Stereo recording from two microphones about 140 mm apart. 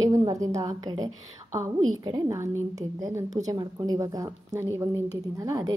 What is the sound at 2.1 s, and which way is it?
Speech, 30° right (ahead or behind).